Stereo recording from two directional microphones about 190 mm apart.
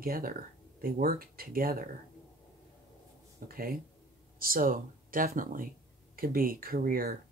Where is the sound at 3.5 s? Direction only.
50° right (ahead or behind).